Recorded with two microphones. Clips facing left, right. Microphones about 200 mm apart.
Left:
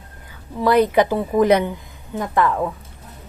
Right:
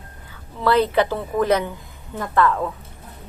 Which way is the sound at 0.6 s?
15° left (ahead or behind).